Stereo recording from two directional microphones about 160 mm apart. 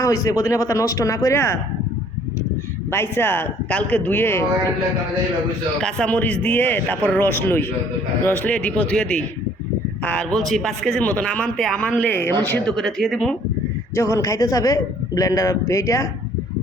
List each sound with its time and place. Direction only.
0.0 s a man's voice: 20° left (ahead or behind)
2.9 s speech: 15° left (ahead or behind)
5.8 s a man's voice: 5° left (ahead or behind)
13.9 s a man's voice: 20° left (ahead or behind)